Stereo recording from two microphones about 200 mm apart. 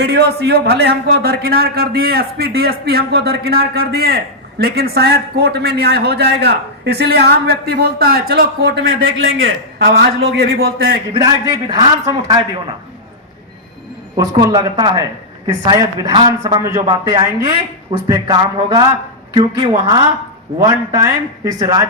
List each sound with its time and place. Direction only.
0.0 s a man's voice: 55° right (ahead or behind)
9.8 s a man's voice: 50° right (ahead or behind)
11.7 s a man's voice: 20° right (ahead or behind)
14.2 s a man's voice: 20° right (ahead or behind)